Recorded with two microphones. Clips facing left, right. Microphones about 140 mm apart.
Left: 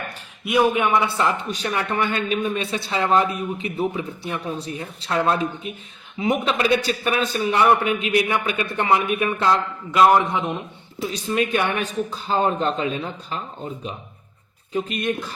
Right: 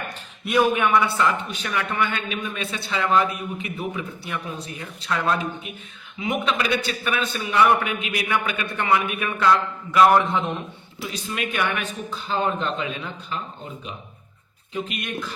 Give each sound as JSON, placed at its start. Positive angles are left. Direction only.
{"t": 0.4, "sound": "a man's voice", "side_deg": 15}
{"t": 1.5, "sound": "a man's voice", "side_deg": 35}
{"t": 11.1, "sound": "speech", "side_deg": 35}
{"t": 14.7, "sound": "speech", "side_deg": 35}